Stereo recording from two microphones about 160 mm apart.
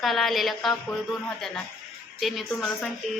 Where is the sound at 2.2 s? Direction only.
Centre (ahead or behind).